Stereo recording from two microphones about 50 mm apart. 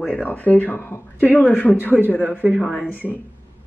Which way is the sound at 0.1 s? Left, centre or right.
Left.